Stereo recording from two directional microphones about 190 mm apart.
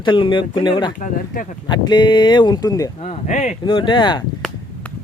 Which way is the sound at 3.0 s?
35° left (ahead or behind).